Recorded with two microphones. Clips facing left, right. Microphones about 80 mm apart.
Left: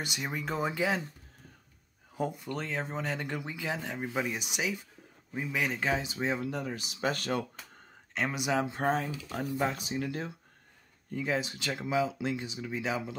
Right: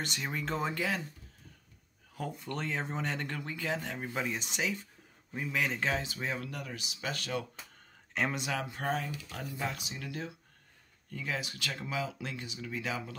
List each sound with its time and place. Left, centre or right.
0.0 s speech: centre
2.3 s speech: centre
3.3 s speech: centre
6.0 s speech: left
6.8 s speech: left
8.1 s speech: centre
8.4 s speech: left